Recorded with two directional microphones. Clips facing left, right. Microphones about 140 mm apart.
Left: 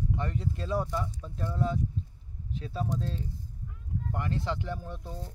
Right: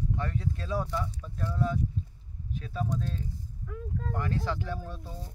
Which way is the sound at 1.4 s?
25° left (ahead or behind).